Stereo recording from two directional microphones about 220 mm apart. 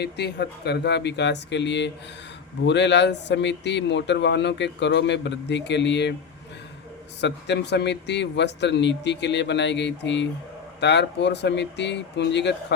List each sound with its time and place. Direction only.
0.0 s speech: 50° left (ahead or behind)
7.2 s speech: 50° left (ahead or behind)